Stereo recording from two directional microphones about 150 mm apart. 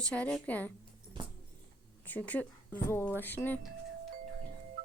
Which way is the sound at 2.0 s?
10° left (ahead or behind).